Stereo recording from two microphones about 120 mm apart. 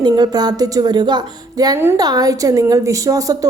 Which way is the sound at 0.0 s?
35° right (ahead or behind).